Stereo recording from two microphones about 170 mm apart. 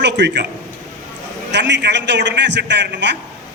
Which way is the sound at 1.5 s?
90° right.